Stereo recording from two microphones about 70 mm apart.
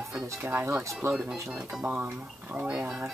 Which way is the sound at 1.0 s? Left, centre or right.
Right.